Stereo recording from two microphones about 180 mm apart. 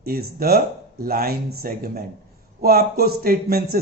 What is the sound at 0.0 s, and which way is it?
Speech, 55° right (ahead or behind).